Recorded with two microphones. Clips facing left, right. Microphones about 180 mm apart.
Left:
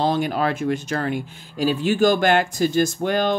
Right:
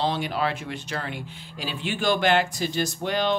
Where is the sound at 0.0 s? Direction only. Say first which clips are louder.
Left 5 dB; 45° left (ahead or behind).